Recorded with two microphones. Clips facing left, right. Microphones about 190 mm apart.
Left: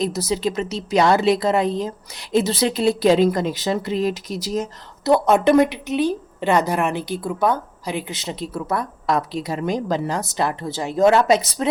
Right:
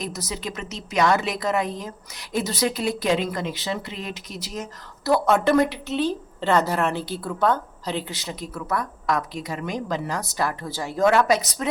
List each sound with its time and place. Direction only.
0.0 s a woman's voice: 30° left (ahead or behind)
5.0 s a woman's voice: 20° left (ahead or behind)